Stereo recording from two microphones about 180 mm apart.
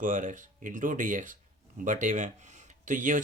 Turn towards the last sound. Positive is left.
turn(degrees=-45)  # may be behind; listen again after turning